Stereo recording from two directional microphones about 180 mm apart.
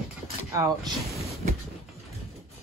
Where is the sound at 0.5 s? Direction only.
20° right (ahead or behind).